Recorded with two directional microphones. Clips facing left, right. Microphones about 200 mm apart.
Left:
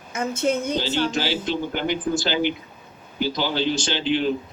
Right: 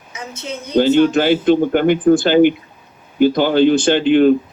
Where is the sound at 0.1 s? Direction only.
50° left (ahead or behind).